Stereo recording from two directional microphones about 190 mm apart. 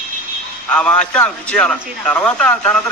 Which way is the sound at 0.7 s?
5° left (ahead or behind).